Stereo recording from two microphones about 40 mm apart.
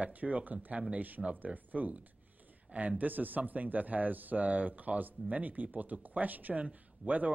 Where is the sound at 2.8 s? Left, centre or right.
Right.